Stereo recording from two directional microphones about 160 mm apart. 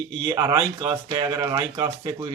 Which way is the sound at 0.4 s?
25° right (ahead or behind).